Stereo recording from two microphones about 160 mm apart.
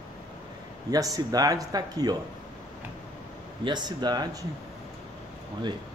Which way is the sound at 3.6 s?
25° right (ahead or behind).